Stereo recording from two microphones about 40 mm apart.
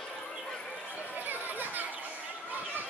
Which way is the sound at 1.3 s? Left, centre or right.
Right.